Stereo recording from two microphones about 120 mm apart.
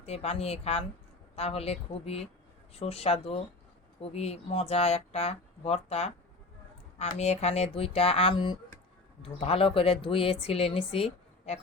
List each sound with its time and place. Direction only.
0.0 s speech: 60° left (ahead or behind)
7.2 s a woman's voice: 65° left (ahead or behind)